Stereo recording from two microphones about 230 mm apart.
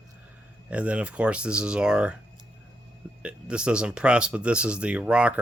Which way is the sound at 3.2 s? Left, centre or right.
Centre.